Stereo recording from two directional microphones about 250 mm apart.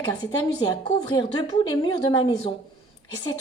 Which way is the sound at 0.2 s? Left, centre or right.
Centre.